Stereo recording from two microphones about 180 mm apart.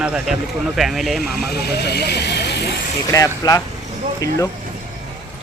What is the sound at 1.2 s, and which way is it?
Speech, 60° left (ahead or behind).